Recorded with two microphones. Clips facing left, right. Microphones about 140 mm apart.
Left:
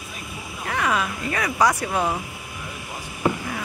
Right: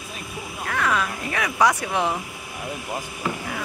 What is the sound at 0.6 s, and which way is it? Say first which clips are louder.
Frog: even; 15° left (ahead or behind).